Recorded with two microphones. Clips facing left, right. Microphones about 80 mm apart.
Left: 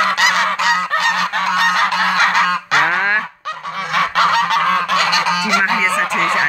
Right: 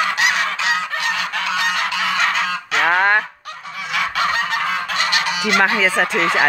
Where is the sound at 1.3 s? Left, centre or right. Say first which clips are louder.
Left 5 dB; left.